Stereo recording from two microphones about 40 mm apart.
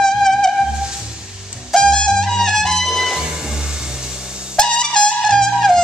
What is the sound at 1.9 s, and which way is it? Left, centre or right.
Music, centre.